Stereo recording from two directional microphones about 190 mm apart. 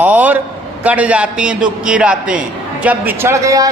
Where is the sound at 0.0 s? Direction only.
10° right (ahead or behind).